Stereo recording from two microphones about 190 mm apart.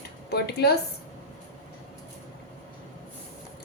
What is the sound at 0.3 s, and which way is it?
Speech, 55° left (ahead or behind).